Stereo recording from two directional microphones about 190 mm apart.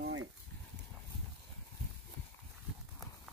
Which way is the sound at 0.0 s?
90° right.